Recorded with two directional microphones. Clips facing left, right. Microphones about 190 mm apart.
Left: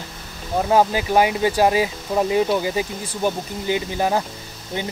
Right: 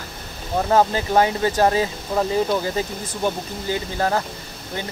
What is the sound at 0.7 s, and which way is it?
Speech, 10° left (ahead or behind).